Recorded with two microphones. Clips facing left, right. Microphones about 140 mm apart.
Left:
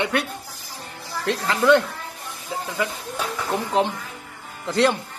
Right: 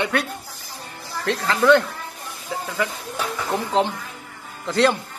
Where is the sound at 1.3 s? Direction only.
20° left (ahead or behind).